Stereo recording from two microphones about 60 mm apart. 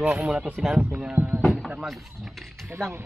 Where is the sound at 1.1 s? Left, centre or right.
Right.